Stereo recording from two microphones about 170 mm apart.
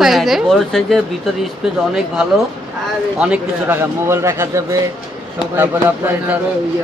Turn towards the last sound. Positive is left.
turn(degrees=-15)  # may be behind; listen again after turning